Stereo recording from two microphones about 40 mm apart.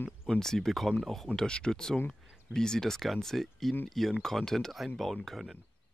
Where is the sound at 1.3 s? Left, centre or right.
Left.